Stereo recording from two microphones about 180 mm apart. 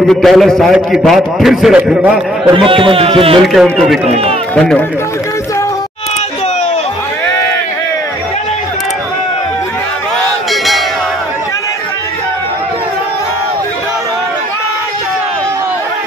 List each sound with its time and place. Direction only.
0.1 s a man's voice: centre (ahead or behind)
2.5 s a man's voice: 30° right (ahead or behind)
3.4 s a man's voice: centre (ahead or behind)
4.1 s a man's voice: 35° right (ahead or behind)
4.6 s a man's voice: 5° left (ahead or behind)
10.5 s music: centre (ahead or behind)